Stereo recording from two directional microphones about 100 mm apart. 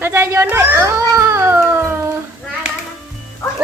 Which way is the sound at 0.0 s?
25° right (ahead or behind).